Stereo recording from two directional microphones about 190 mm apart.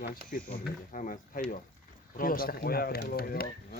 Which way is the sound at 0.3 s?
45° left (ahead or behind).